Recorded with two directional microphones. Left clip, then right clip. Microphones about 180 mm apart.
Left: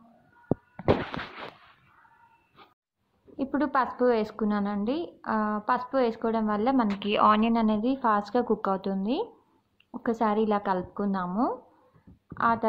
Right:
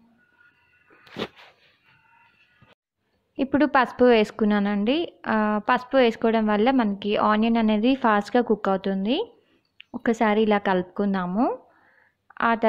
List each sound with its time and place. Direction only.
3.3 s a woman's voice: 35° right (ahead or behind)